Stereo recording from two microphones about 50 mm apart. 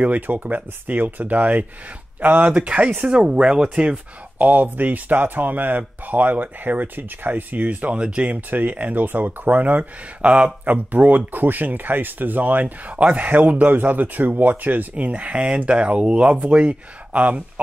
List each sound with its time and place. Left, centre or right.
0.0 s speech: right
4.5 s speech: right
10.2 s speech: right
10.6 s speech: right